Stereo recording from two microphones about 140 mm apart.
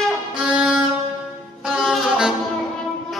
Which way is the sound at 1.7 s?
5° right (ahead or behind).